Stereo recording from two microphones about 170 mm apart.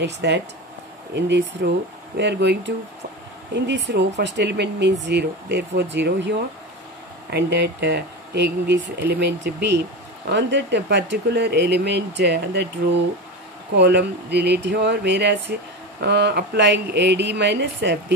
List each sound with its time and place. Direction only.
0.0 s speech: 90° right